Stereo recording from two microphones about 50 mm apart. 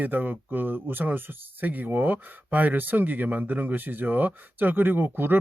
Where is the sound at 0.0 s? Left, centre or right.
Right.